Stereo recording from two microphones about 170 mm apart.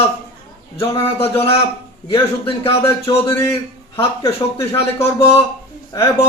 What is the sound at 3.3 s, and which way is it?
Speech, 15° left (ahead or behind).